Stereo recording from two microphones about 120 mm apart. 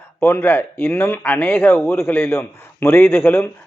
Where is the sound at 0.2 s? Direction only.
20° left (ahead or behind).